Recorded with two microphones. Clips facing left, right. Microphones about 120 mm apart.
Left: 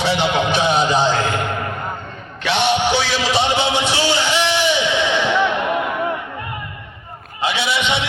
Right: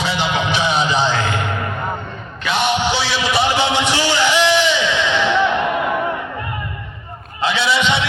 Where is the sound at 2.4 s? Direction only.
70° left (ahead or behind); by 3.2 s 55° left (ahead or behind).